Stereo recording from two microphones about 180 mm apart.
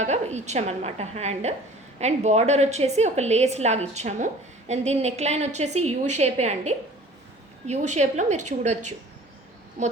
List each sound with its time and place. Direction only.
0.0 s a woman's voice: 40° right (ahead or behind)